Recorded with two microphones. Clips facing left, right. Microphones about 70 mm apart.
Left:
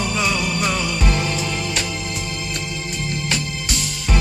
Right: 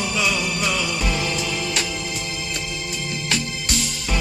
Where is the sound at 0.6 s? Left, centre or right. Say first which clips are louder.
Left 2 dB; left.